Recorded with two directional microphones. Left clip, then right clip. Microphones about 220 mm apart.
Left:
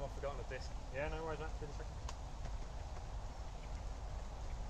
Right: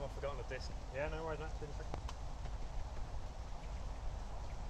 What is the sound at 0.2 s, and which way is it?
Vehicle, 50° right (ahead or behind).